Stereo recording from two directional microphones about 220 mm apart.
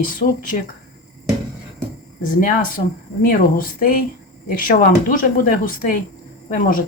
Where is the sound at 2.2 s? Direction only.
40° left (ahead or behind).